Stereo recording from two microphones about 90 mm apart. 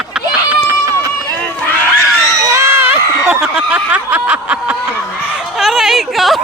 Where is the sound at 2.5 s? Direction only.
30° right (ahead or behind).